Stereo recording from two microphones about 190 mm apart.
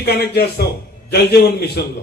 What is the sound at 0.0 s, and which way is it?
A man's voice, 55° left (ahead or behind).